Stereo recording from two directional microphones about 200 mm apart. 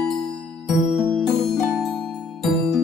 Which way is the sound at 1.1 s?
Centre (ahead or behind).